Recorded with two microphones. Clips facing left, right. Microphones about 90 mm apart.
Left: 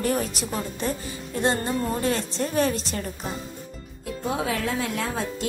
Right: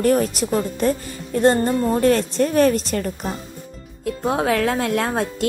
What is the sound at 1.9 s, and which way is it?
Speech, 60° right (ahead or behind).